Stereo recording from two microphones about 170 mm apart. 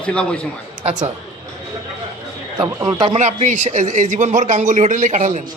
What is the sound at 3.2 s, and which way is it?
A man's voice, 45° right (ahead or behind).